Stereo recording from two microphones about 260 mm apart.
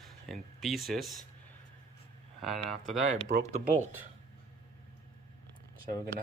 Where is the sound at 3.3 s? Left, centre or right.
Right.